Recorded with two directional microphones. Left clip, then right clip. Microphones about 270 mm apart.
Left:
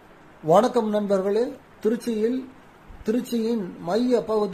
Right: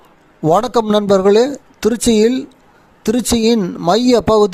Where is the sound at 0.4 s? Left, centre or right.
Right.